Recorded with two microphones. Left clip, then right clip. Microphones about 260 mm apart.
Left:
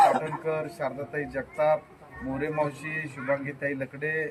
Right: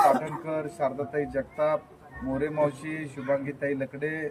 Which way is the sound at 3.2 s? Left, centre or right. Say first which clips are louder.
Right 2 dB; centre.